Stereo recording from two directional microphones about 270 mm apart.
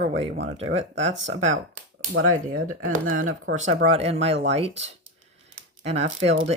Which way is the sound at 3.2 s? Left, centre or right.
Right.